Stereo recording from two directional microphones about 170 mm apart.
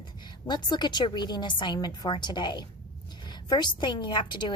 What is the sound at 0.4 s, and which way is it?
A woman's voice, 25° left (ahead or behind).